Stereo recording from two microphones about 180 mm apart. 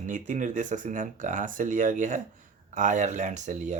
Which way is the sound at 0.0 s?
45° right (ahead or behind).